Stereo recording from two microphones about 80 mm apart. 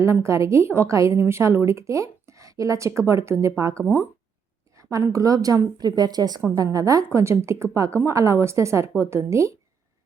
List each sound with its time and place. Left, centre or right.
0.0 s a woman's voice: right
4.8 s a woman's voice: right